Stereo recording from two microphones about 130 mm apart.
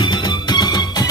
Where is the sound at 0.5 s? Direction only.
35° left (ahead or behind).